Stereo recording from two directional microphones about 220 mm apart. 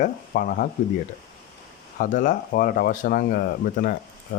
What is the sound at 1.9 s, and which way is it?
Speech, 35° left (ahead or behind).